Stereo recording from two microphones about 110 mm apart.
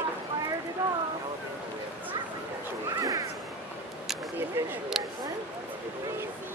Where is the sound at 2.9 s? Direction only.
30° right (ahead or behind).